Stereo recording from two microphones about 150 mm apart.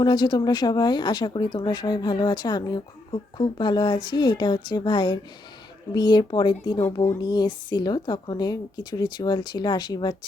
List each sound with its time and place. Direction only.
0.0 s speech: 30° left (ahead or behind)